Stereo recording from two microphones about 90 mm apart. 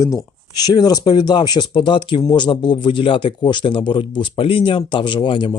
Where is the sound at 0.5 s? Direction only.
50° left (ahead or behind).